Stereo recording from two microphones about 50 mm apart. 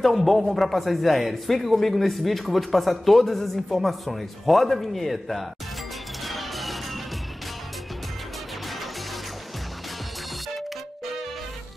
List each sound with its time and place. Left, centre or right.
0.0 s speech: centre
6.2 s music: centre